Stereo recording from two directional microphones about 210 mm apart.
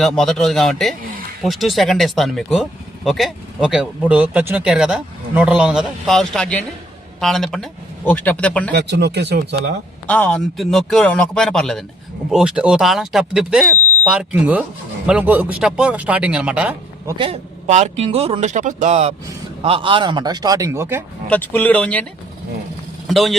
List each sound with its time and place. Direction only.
0.0 s speech: centre (ahead or behind)
8.7 s speech: 55° right (ahead or behind)
10.1 s speech: 5° left (ahead or behind)
17.2 s a man's voice: 30° right (ahead or behind); by 21.0 s 10° right (ahead or behind)
21.2 s speech: 10° left (ahead or behind)
23.0 s speech: centre (ahead or behind)